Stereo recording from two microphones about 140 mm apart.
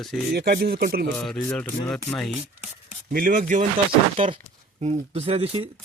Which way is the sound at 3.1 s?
80° right.